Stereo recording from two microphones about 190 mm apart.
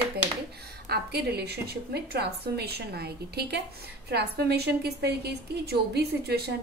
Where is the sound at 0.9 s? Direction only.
60° right (ahead or behind).